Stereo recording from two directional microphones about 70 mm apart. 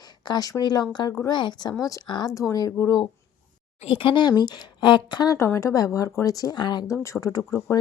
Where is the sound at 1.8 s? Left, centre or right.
Left.